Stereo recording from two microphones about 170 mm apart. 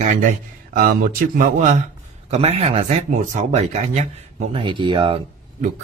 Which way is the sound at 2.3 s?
35° right (ahead or behind).